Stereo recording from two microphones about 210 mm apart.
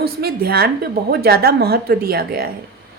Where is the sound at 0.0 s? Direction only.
45° right (ahead or behind).